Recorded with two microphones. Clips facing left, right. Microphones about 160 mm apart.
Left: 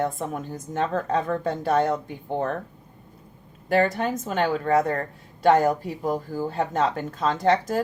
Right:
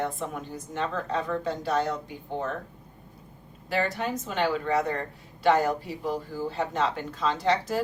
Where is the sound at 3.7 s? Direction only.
50° left (ahead or behind).